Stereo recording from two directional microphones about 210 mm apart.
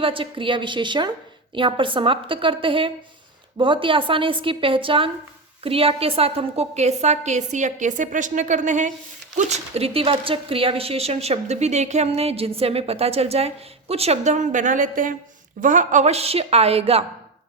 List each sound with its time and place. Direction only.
0.0 s a woman's voice: 25° right (ahead or behind)